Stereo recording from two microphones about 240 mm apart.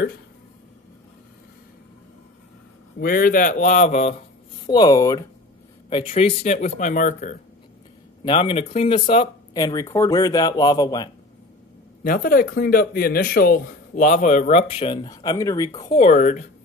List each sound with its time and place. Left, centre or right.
3.0 s a man's voice: left
4.6 s speech: centre; by 7.3 s left
8.2 s speech: left
12.0 s a man's voice: left; by 16.0 s centre
16.0 s a man's voice: left